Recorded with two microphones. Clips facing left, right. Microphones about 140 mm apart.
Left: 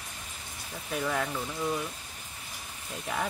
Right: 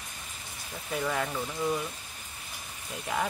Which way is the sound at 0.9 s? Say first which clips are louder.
Even; centre (ahead or behind).